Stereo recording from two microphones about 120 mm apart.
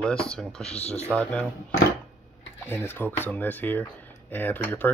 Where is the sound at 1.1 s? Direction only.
10° left (ahead or behind).